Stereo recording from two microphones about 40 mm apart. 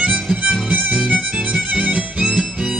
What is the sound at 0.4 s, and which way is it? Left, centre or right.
Music, right.